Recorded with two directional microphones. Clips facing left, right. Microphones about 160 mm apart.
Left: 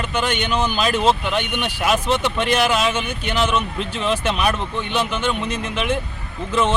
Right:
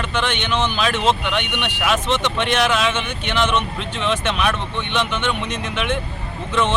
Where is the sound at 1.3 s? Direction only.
35° left (ahead or behind).